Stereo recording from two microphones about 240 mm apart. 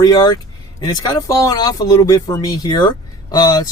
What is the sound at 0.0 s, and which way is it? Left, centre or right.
Speech, centre.